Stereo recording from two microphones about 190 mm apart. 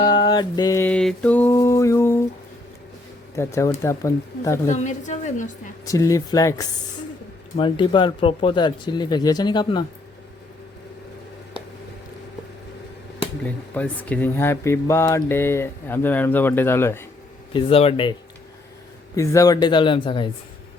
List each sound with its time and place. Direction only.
0.0 s speech: 25° left (ahead or behind)
3.3 s speech: 15° left (ahead or behind)
4.7 s a woman's voice: 40° left (ahead or behind)
5.8 s speech: 15° left (ahead or behind)
13.4 s speech: 10° left (ahead or behind)
17.5 s speech: 30° left (ahead or behind)
19.1 s speech: 15° left (ahead or behind)